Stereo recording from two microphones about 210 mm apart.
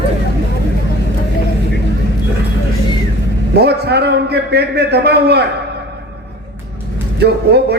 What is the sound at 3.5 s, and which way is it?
A man's voice, 50° right (ahead or behind).